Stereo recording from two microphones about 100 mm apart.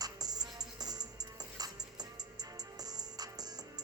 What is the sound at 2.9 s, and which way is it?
Music, 40° right (ahead or behind).